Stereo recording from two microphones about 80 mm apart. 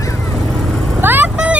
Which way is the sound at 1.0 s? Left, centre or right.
Right.